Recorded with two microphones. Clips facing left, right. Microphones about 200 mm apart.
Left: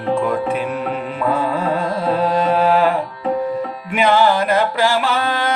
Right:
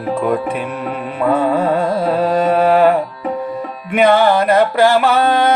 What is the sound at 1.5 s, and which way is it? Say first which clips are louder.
Music: right 4 dB; 60° right (ahead or behind).